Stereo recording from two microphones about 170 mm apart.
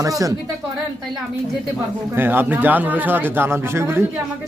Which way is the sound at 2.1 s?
10° right (ahead or behind).